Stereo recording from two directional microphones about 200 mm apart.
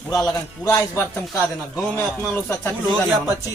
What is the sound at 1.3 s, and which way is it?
Speech, centre (ahead or behind).